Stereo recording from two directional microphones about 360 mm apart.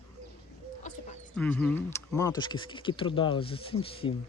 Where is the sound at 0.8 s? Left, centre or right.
Centre.